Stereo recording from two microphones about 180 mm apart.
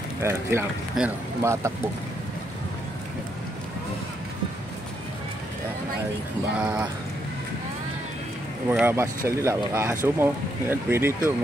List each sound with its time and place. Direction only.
0.2 s speech: 15° right (ahead or behind)
1.0 s speech: 5° right (ahead or behind)
1.4 s speech: 15° right (ahead or behind)
6.5 s speech: 5° right (ahead or behind)
8.6 s speech: 10° right (ahead or behind)